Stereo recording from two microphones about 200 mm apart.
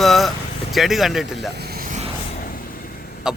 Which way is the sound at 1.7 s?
40° right (ahead or behind).